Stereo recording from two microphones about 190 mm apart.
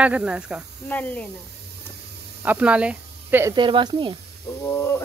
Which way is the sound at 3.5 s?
25° right (ahead or behind).